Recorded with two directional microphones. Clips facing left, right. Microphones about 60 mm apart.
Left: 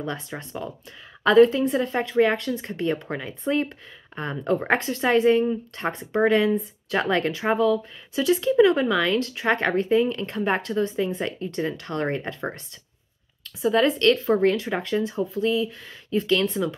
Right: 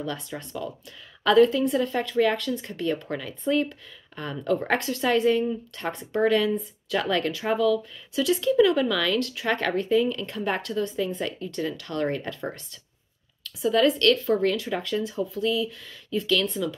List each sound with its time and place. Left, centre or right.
0.0 s speech: left